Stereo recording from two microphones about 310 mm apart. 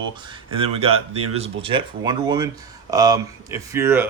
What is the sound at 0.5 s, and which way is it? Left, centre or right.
Speech, centre.